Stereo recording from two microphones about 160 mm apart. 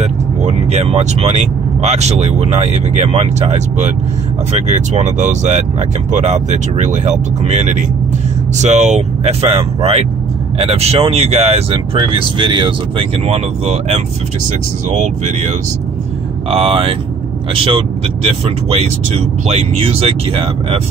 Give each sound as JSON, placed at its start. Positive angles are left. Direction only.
{"t": 0.0, "sound": "speech", "side_deg": -45}
{"t": 16.4, "sound": "speech", "side_deg": -35}
{"t": 18.7, "sound": "speech", "side_deg": -40}